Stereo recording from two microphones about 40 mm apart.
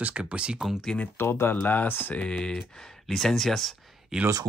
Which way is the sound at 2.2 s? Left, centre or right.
Left.